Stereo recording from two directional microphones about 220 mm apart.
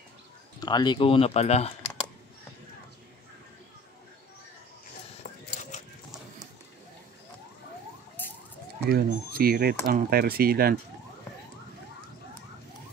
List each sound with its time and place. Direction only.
0.6 s speech: 20° left (ahead or behind)
5.2 s a sound: 40° left (ahead or behind)
8.2 s emergency vehicle: 10° left (ahead or behind)
8.8 s speech: 45° right (ahead or behind)